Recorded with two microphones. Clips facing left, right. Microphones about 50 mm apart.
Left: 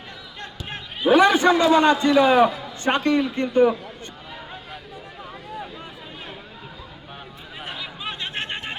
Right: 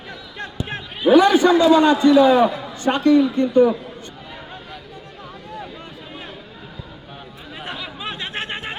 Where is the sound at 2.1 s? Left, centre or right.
Centre.